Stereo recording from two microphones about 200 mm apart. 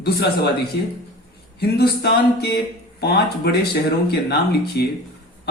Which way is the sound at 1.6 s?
55° left (ahead or behind).